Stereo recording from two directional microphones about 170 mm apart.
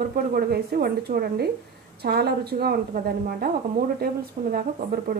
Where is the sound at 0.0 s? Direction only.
60° right (ahead or behind).